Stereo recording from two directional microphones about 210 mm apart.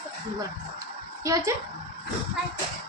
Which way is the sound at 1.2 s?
15° right (ahead or behind).